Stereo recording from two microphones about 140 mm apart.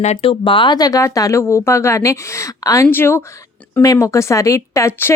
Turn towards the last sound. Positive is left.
turn(degrees=15)  # may be behind; listen again after turning